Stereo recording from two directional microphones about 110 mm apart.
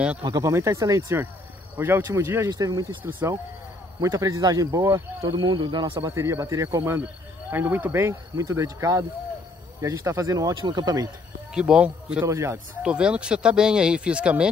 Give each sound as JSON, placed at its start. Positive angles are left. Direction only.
{"t": 0.3, "sound": "speech", "side_deg": -25}
{"t": 3.0, "sound": "speech", "side_deg": -15}
{"t": 4.0, "sound": "speech", "side_deg": -35}
{"t": 5.3, "sound": "speech", "side_deg": -45}
{"t": 6.0, "sound": "speech", "side_deg": -25}
{"t": 11.5, "sound": "speech", "side_deg": -10}
{"t": 12.3, "sound": "speech", "side_deg": -25}
{"t": 12.8, "sound": "speech", "side_deg": -10}